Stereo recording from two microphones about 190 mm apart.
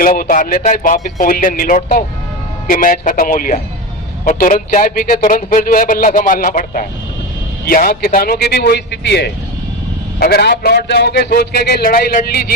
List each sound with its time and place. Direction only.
0.0 s a man's voice: 45° left (ahead or behind)